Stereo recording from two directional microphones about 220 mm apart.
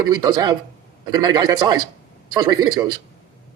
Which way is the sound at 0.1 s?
20° right (ahead or behind).